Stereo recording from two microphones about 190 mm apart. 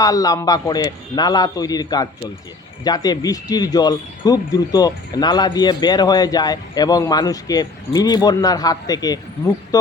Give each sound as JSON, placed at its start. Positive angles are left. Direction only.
{"t": 0.0, "sound": "speech", "side_deg": 20}